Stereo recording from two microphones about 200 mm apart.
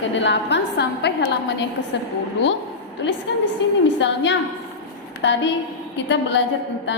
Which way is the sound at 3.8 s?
65° left (ahead or behind).